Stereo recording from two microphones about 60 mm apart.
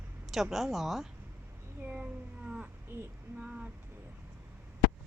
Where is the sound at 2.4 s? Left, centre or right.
Right.